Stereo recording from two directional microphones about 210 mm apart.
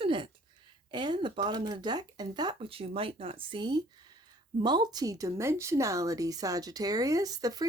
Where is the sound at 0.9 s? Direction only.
20° right (ahead or behind).